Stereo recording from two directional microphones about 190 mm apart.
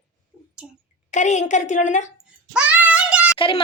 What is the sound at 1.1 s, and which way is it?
Speech, 40° left (ahead or behind).